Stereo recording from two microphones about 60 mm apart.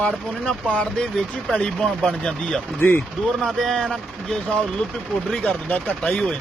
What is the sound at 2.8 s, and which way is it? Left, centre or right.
Speech, left.